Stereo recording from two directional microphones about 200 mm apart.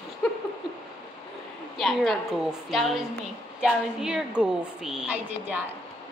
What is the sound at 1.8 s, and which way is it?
A woman's voice, centre (ahead or behind).